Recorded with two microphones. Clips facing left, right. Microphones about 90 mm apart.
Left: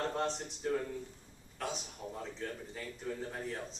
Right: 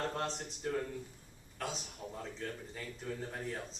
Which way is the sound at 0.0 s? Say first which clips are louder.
Left 2 dB; centre (ahead or behind).